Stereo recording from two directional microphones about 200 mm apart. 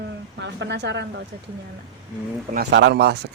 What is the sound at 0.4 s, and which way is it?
Speech, 60° right (ahead or behind).